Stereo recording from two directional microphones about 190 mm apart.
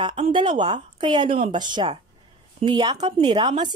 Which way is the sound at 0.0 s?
25° right (ahead or behind).